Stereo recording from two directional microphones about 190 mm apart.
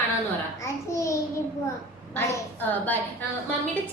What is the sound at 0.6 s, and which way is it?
Babbling, 15° left (ahead or behind).